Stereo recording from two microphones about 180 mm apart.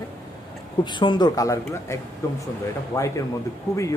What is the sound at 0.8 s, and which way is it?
Speech, 25° left (ahead or behind).